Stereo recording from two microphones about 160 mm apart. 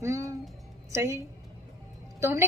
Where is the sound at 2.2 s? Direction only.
15° right (ahead or behind).